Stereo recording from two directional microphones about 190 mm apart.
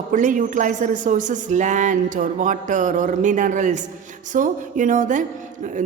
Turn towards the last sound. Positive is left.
turn(degrees=-40)  # may be behind; listen again after turning